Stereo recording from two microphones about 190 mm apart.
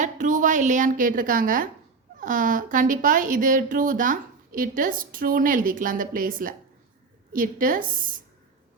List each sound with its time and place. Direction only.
0.0 s a woman's voice: 45° right (ahead or behind)